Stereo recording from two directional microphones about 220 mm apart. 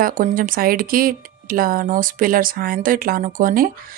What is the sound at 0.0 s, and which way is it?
Speech, 40° right (ahead or behind).